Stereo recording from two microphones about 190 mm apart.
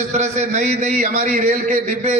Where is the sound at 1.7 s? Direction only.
35° right (ahead or behind).